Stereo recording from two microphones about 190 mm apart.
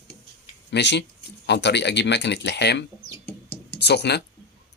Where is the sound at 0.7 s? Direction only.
65° left (ahead or behind).